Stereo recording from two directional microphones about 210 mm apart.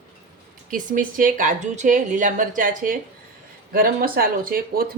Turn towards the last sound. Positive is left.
turn(degrees=-45)  # may be behind; listen again after turning